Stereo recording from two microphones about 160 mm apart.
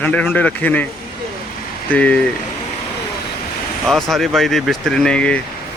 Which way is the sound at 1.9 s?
10° left (ahead or behind).